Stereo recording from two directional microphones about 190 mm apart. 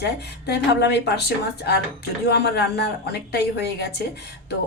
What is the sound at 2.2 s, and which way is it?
A woman's voice, 60° left (ahead or behind).